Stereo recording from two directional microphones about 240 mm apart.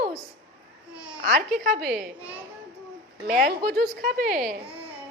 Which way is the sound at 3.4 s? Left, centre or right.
Right.